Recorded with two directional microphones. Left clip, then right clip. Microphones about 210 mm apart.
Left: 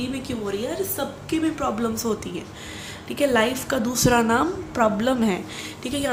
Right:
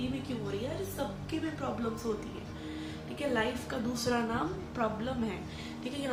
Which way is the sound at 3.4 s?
50° left (ahead or behind).